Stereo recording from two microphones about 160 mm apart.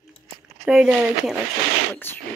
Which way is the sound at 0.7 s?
5° right (ahead or behind).